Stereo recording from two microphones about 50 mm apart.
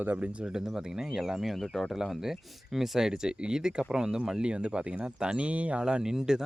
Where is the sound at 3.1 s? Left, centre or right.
Centre.